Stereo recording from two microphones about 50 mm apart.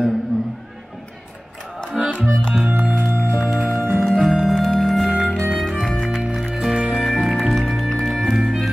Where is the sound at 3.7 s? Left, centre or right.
Right.